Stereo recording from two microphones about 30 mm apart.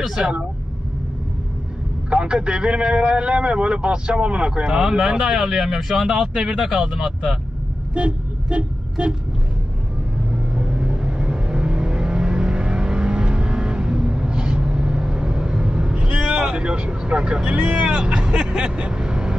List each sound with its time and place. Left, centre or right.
0.2 s a man's voice: right
2.0 s a man's voice: right
4.5 s speech: right
5.3 s speech: centre
6.3 s a man's voice: right
6.6 s speech: centre
7.9 s vehicle: right
10.3 s vehicle: right
17.0 s speech: right
17.5 s a man's voice: right
18.9 s vehicle: right